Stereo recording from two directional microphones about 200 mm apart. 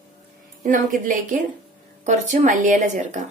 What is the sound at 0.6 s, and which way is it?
Speech, 40° right (ahead or behind).